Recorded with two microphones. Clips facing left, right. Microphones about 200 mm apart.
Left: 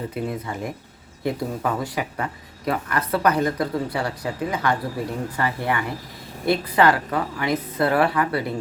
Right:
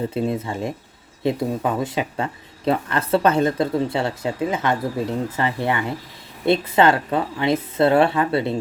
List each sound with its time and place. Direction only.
0.1 s speech: 25° right (ahead or behind)